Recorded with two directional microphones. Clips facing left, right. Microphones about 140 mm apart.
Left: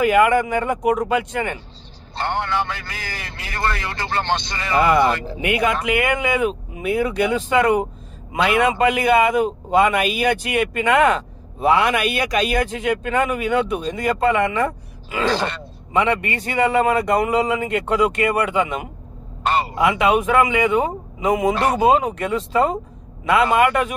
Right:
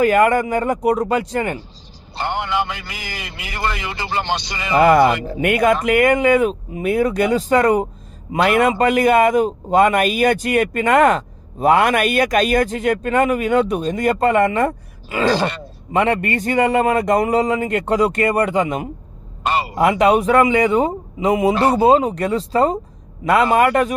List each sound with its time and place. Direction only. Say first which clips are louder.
0.0 s speech: right 1 dB; 45° right (ahead or behind)
2.1 s a man's voice: right 1 dB; 15° right (ahead or behind)
4.7 s a man's voice: right 4 dB; 45° right (ahead or behind)
15.9 s a man's voice: right 2 dB; 50° right (ahead or behind)